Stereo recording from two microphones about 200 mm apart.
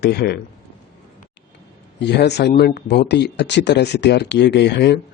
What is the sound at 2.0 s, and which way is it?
Speech, 55° left (ahead or behind).